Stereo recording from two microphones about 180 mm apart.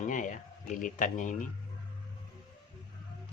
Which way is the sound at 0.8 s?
45° left (ahead or behind).